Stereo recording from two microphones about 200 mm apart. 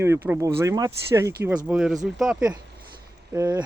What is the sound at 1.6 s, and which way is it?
Speech, 5° right (ahead or behind).